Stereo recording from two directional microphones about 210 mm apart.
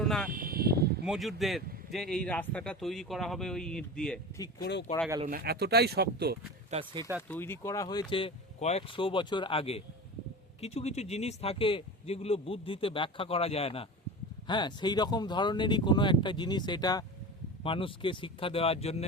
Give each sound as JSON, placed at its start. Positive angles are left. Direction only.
{"t": 0.0, "sound": "a sound", "side_deg": 0}
{"t": 0.3, "sound": "a sound", "side_deg": -45}
{"t": 1.0, "sound": "speech", "side_deg": 0}
{"t": 4.6, "sound": "speech", "side_deg": 55}
{"t": 5.3, "sound": "speech", "side_deg": -50}
{"t": 6.7, "sound": "speech", "side_deg": -30}
{"t": 7.2, "sound": "speech", "side_deg": 10}